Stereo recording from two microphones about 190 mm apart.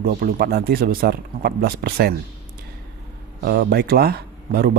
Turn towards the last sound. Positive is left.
turn(degrees=-55)  # may be behind; listen again after turning